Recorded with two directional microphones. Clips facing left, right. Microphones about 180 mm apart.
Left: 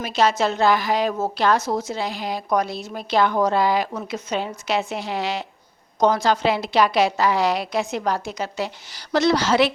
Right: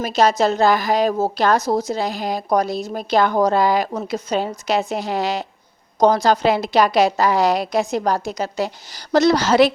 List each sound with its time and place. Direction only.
0.0 s a woman's voice: 40° right (ahead or behind)